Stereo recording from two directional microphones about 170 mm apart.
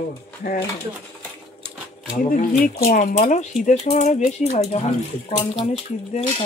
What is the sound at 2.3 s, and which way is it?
Speech, 50° left (ahead or behind).